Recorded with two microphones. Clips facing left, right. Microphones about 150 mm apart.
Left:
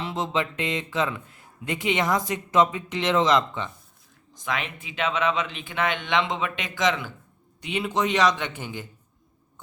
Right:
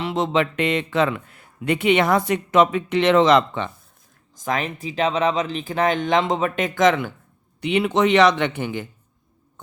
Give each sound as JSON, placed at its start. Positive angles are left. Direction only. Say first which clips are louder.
{"t": 0.0, "sound": "a man's voice", "louder": "right 6 dB", "side_deg": -70}
{"t": 4.4, "sound": "speech", "louder": "right 6 dB", "side_deg": -40}
{"t": 7.6, "sound": "speech", "louder": "right 7 dB", "side_deg": -65}